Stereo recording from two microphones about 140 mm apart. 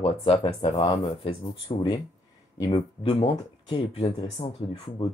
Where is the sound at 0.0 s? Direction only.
40° left (ahead or behind).